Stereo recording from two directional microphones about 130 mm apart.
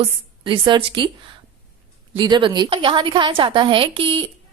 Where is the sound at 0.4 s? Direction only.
35° right (ahead or behind).